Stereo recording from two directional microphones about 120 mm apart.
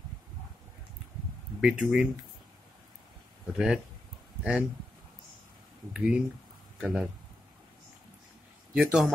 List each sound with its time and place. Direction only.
1.6 s speech: 5° right (ahead or behind)
3.5 s speech: 5° right (ahead or behind)
5.9 s speech: 10° right (ahead or behind)
8.7 s speech: 10° right (ahead or behind)